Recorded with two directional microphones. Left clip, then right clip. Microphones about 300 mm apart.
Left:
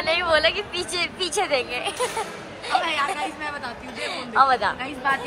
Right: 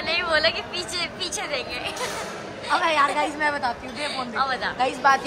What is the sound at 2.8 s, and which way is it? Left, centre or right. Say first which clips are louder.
Speech: right 4 dB; right.